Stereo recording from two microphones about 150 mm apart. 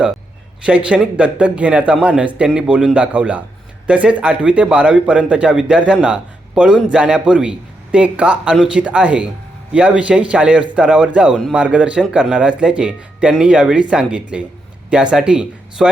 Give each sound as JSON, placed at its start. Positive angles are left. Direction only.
{"t": 0.6, "sound": "a man's voice", "side_deg": -5}